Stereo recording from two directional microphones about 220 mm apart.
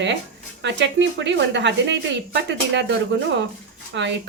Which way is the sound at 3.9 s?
55° right (ahead or behind).